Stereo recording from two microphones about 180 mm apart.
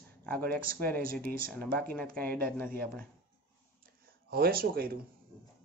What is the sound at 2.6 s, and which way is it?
Speech, 55° right (ahead or behind).